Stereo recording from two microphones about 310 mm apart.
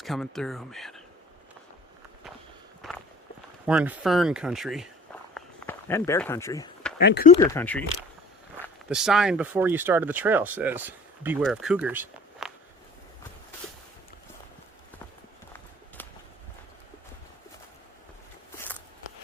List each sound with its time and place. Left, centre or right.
0.0 s speech: centre
2.8 s clip-clop: centre
3.7 s speech: centre
5.3 s a sound: centre
7.0 s speech: left
7.3 s speech: centre
16.0 s clip-clop: centre
18.5 s a sound: centre